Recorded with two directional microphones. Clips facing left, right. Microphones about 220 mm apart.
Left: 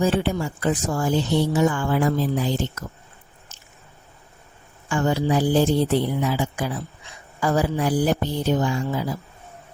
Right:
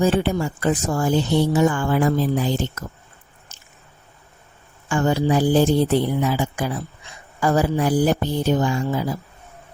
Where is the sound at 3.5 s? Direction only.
50° right (ahead or behind).